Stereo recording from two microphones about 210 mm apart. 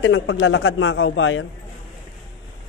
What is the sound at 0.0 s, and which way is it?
A man's voice, 70° left (ahead or behind).